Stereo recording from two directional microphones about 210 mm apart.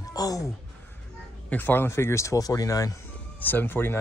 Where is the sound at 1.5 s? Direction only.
10° left (ahead or behind).